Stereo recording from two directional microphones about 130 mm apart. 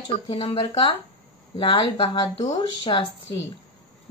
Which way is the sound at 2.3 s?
55° left (ahead or behind).